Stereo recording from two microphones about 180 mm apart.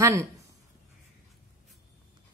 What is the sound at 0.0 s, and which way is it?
Speech, 15° right (ahead or behind).